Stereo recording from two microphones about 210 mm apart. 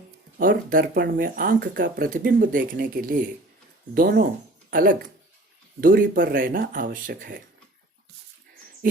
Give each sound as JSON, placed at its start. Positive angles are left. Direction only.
{"t": 0.3, "sound": "speech", "side_deg": -45}